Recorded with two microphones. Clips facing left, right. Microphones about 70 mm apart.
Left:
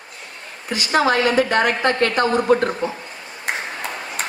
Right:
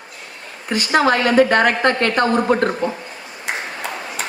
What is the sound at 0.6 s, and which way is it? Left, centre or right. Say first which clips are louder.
A woman's voice: right 2 dB; right.